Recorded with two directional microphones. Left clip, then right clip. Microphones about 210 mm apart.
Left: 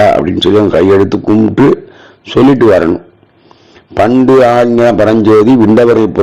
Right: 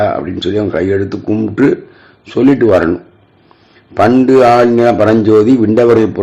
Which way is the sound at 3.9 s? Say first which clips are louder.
Left 2 dB; 25° left (ahead or behind).